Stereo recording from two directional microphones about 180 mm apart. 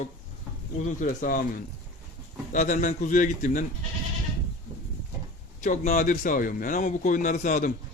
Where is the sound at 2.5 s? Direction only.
45° left (ahead or behind).